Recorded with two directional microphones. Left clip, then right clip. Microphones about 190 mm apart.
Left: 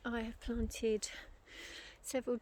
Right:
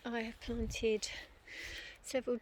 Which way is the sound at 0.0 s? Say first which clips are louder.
Right 1 dB; 20° left (ahead or behind).